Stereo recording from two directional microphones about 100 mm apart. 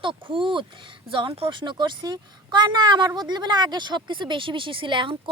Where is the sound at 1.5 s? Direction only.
50° right (ahead or behind).